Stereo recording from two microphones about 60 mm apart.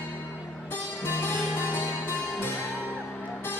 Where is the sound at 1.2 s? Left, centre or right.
Left.